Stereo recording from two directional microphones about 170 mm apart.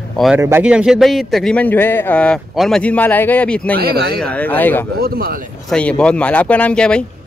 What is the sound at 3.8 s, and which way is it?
Speech, 70° right (ahead or behind).